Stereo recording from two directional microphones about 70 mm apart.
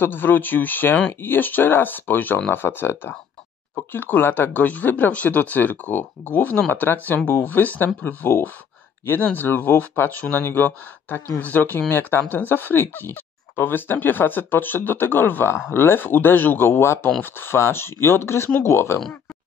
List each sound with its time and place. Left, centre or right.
0.0 s speech: left